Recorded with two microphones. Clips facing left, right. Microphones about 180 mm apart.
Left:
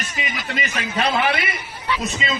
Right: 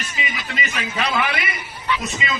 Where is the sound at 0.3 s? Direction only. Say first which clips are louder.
Left 3 dB; 45° left (ahead or behind).